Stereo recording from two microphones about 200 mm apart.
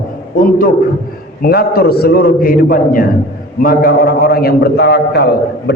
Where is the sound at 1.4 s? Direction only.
50° left (ahead or behind).